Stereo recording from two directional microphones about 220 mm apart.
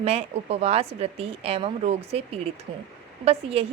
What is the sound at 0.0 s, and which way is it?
A woman's voice, 25° right (ahead or behind).